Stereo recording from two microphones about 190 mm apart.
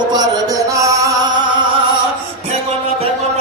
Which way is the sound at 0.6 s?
15° right (ahead or behind).